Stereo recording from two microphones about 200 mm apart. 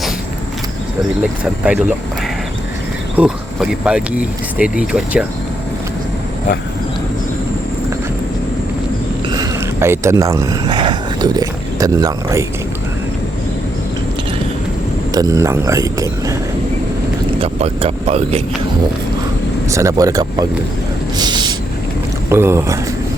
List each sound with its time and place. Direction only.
1.6 s speech: 5° right (ahead or behind)
3.2 s speech: 5° right (ahead or behind)
9.3 s speech: 15° right (ahead or behind)
15.1 s a man's voice: 15° right (ahead or behind)
17.4 s speech: 30° right (ahead or behind)
19.6 s a man's voice: 15° right (ahead or behind)
21.2 s a sound: 20° right (ahead or behind)
22.3 s a man's voice: 10° right (ahead or behind)